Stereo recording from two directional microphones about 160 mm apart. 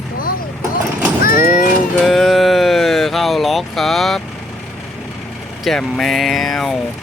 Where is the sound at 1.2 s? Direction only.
65° left (ahead or behind).